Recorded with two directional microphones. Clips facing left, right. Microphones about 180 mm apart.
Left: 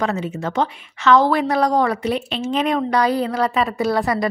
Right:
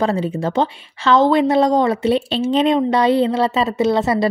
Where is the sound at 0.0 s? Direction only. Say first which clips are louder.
Right 4 dB; 30° right (ahead or behind).